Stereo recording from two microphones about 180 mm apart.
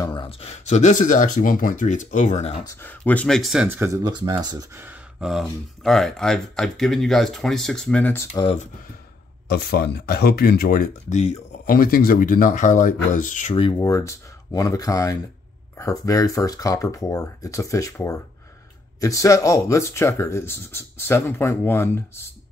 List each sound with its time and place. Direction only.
0.0 s speech: 25° left (ahead or behind); by 2.5 s 40° left (ahead or behind)
2.6 s speech: 15° left (ahead or behind)
8.3 s speech: 35° left (ahead or behind)
9.5 s speech: 60° left (ahead or behind); by 13.6 s 45° left (ahead or behind)
13.6 s speech: 25° left (ahead or behind)